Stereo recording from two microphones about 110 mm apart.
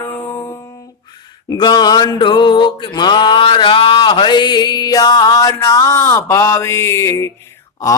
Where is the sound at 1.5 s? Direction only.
40° left (ahead or behind).